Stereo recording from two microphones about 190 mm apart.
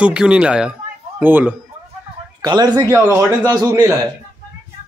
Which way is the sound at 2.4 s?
20° right (ahead or behind).